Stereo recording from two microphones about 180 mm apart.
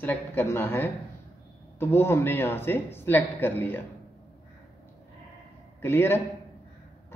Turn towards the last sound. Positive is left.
turn(degrees=15)  # may be behind; listen again after turning